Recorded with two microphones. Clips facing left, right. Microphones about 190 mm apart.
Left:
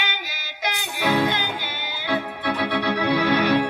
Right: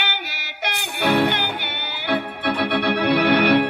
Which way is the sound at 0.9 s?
65° right (ahead or behind).